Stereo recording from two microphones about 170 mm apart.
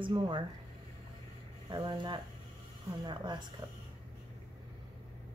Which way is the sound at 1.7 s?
25° right (ahead or behind).